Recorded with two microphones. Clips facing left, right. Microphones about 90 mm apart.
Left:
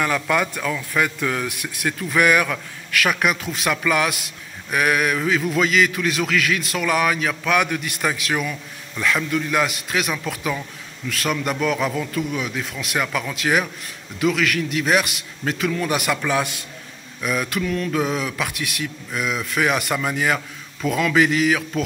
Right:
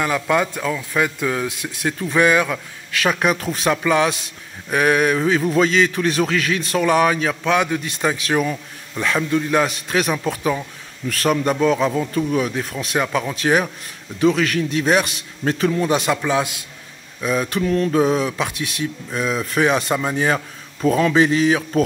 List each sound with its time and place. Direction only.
0.0 s a man's voice: 20° right (ahead or behind)